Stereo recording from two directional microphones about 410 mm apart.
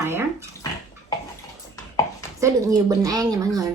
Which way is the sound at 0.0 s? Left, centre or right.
Centre.